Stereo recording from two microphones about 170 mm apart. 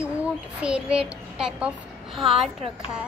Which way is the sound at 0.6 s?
5° right (ahead or behind).